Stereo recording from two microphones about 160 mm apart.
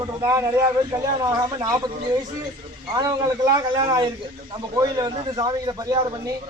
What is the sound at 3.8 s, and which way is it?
A man's voice, 25° right (ahead or behind).